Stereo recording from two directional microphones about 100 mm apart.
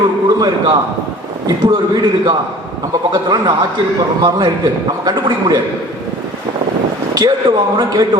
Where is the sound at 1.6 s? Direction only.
40° right (ahead or behind).